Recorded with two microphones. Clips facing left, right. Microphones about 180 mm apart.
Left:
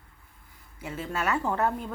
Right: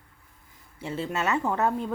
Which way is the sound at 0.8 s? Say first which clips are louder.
Right 2 dB; 30° right (ahead or behind).